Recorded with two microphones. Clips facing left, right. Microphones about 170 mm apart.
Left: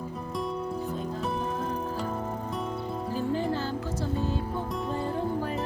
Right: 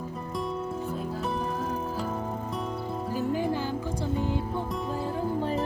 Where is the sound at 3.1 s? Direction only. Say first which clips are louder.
Right 1 dB; 10° right (ahead or behind).